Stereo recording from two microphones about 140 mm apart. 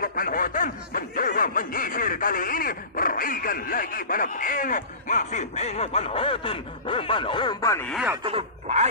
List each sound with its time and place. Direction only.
0.0 s snicker: 85° left; by 7.7 s 35° left (ahead or behind)
8.2 s grunt: 40° right (ahead or behind)